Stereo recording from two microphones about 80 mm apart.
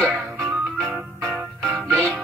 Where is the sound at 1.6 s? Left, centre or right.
Right.